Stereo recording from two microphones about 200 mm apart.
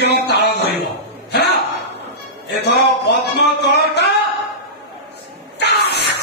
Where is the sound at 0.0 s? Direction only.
55° left (ahead or behind).